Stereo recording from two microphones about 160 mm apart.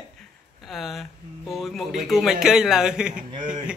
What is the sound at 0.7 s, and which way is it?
A man's voice, centre (ahead or behind).